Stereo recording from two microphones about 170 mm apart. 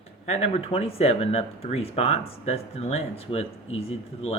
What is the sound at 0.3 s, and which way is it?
Speech, 35° left (ahead or behind).